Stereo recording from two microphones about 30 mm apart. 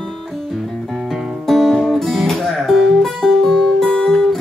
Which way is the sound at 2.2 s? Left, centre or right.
Centre.